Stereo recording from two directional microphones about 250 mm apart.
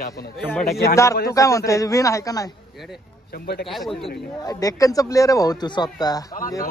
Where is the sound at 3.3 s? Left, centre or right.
Left.